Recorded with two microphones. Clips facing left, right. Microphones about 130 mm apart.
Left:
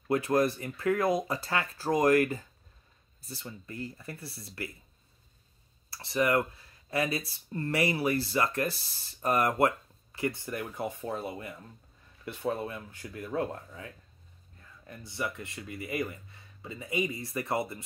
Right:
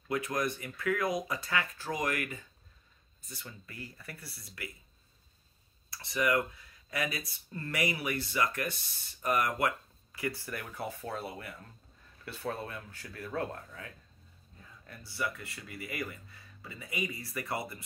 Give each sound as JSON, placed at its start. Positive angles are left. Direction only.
{"t": 0.1, "sound": "speech", "side_deg": 30}
{"t": 5.9, "sound": "speech", "side_deg": 30}